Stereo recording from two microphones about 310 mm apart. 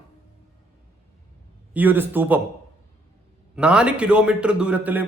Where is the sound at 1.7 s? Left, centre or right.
Centre.